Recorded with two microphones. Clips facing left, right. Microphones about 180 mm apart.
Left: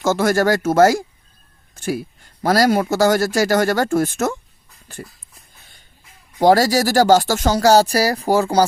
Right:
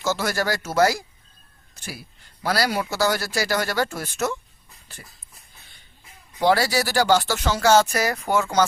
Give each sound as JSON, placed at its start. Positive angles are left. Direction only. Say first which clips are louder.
{"t": 0.0, "sound": "a man's voice", "louder": "left 8 dB", "side_deg": 50}
{"t": 6.4, "sound": "speech", "louder": "left 6 dB", "side_deg": 40}